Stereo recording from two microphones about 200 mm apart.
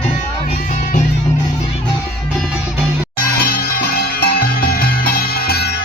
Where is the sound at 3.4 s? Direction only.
50° left (ahead or behind).